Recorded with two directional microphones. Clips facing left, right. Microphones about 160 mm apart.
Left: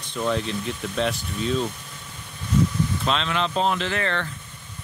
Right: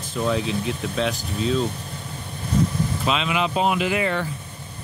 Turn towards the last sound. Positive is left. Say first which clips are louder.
# right 4 dB
turn(degrees=-10)  # may be behind; listen again after turning